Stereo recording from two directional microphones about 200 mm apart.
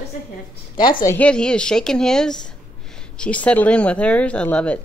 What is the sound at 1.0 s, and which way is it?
A woman's voice, 5° left (ahead or behind).